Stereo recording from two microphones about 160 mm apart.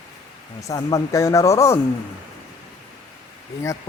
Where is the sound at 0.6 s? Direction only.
20° left (ahead or behind).